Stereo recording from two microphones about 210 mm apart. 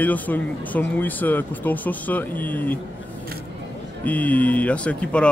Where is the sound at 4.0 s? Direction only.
5° left (ahead or behind).